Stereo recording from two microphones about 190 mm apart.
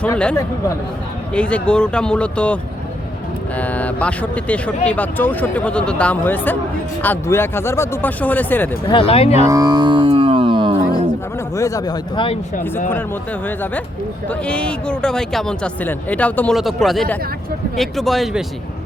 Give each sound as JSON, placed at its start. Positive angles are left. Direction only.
{"t": 0.0, "sound": "speech", "side_deg": 5}
{"t": 3.6, "sound": "speech", "side_deg": 10}
{"t": 8.9, "sound": "speech", "side_deg": 30}
{"t": 9.5, "sound": "music", "side_deg": -20}
{"t": 11.5, "sound": "speech", "side_deg": 15}
{"t": 14.3, "sound": "speech", "side_deg": 5}